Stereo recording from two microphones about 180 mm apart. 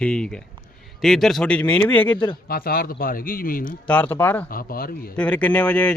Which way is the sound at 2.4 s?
55° left (ahead or behind).